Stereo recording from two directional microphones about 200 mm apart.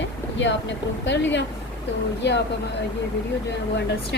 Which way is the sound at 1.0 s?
65° left (ahead or behind).